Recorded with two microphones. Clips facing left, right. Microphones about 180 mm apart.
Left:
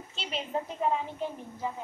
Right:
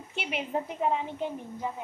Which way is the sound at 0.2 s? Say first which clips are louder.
Right 2 dB; 15° right (ahead or behind).